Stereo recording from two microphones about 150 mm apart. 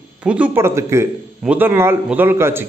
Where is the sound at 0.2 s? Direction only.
10° right (ahead or behind).